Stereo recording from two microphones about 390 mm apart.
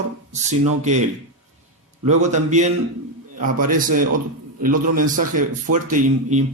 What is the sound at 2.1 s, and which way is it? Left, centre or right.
Speech, centre.